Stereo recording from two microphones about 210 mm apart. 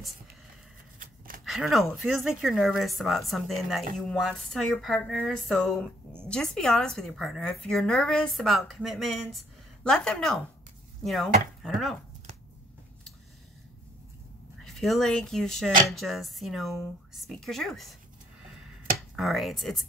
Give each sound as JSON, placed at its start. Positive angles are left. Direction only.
{"t": 0.9, "sound": "a sound", "side_deg": -40}
{"t": 1.4, "sound": "a woman's voice", "side_deg": 0}
{"t": 14.6, "sound": "a woman's voice", "side_deg": 0}
{"t": 18.9, "sound": "speech", "side_deg": 0}